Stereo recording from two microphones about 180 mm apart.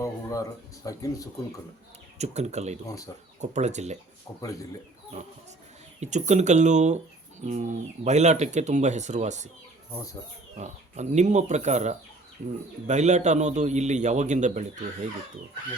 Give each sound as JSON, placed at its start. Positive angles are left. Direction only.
{"t": 0.0, "sound": "a sound", "side_deg": 20}
{"t": 0.8, "sound": "speech", "side_deg": 20}
{"t": 2.1, "sound": "speech", "side_deg": -40}
{"t": 4.3, "sound": "speech", "side_deg": 15}
{"t": 6.0, "sound": "speech", "side_deg": -40}
{"t": 10.6, "sound": "speech", "side_deg": -40}